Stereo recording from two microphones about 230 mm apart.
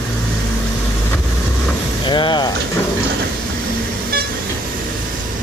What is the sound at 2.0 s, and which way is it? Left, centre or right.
Vehicle, centre.